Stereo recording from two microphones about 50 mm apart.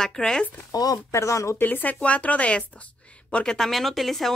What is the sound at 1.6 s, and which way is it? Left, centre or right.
Speech, left.